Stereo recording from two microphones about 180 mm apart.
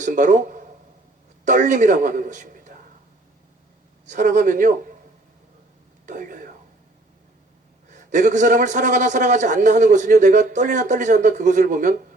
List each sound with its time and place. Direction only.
0.0 s a man's voice: 45° right (ahead or behind)
4.0 s a man's voice: 45° right (ahead or behind)
6.1 s a man's voice: 45° right (ahead or behind)
7.9 s a man's voice: 45° right (ahead or behind)